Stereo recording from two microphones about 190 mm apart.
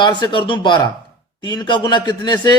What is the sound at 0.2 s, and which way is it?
A man's voice, 25° left (ahead or behind).